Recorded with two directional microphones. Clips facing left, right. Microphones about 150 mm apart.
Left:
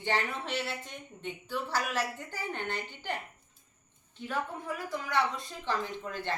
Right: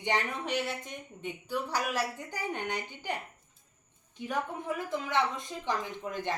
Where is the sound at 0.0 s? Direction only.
15° right (ahead or behind).